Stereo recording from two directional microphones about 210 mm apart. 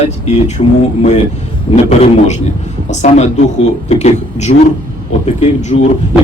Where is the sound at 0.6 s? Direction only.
35° left (ahead or behind).